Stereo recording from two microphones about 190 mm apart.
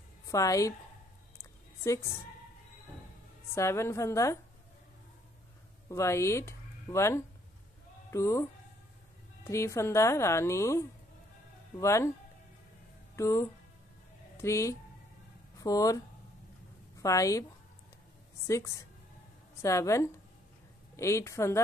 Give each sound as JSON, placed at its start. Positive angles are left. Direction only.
{"t": 0.3, "sound": "speech", "side_deg": 15}
{"t": 1.4, "sound": "a sound", "side_deg": 15}
{"t": 3.5, "sound": "speech", "side_deg": 15}
{"t": 5.9, "sound": "speech", "side_deg": 15}
{"t": 13.1, "sound": "speech", "side_deg": 15}
{"t": 17.0, "sound": "speech", "side_deg": 15}
{"t": 18.5, "sound": "speech", "side_deg": 15}